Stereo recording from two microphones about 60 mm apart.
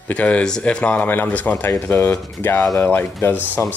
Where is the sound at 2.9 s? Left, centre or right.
Left.